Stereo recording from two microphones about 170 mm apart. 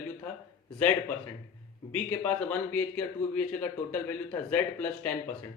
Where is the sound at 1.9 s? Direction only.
10° left (ahead or behind).